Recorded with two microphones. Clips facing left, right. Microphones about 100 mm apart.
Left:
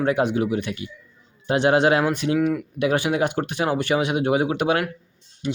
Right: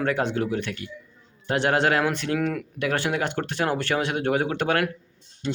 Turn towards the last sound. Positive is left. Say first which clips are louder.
# left 2 dB
turn(degrees=10)  # may be behind; listen again after turning